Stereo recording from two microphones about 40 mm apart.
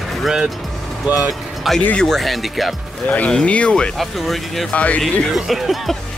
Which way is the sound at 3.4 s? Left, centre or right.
Left.